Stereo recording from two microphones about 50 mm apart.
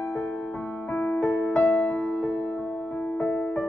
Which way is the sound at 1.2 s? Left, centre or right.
Left.